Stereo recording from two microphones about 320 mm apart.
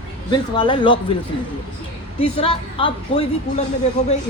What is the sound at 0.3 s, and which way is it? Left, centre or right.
Speech, centre.